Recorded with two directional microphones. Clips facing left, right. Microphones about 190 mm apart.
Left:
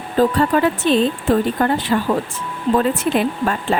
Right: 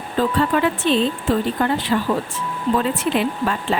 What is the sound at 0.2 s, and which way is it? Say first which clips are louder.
Speech: left 3 dB; 40° left (ahead or behind).